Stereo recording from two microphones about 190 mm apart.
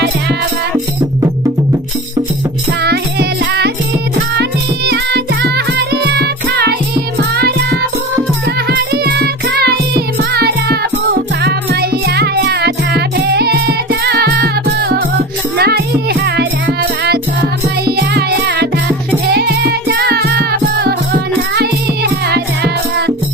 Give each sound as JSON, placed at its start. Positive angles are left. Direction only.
{"t": 2.8, "sound": "music", "side_deg": -60}
{"t": 4.9, "sound": "music", "side_deg": -60}
{"t": 8.9, "sound": "music", "side_deg": -60}